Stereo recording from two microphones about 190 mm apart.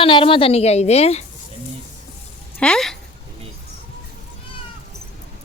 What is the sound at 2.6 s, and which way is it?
Speech, 5° left (ahead or behind).